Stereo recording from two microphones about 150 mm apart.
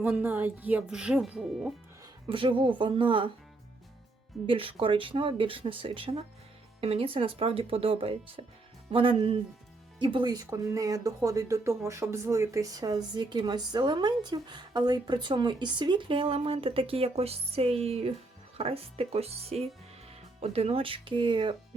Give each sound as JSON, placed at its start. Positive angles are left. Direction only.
{"t": 0.0, "sound": "speech", "side_deg": -10}
{"t": 2.2, "sound": "speech", "side_deg": -35}
{"t": 4.4, "sound": "speech", "side_deg": -35}